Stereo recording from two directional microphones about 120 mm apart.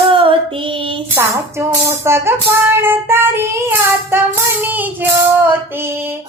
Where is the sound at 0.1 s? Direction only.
50° right (ahead or behind).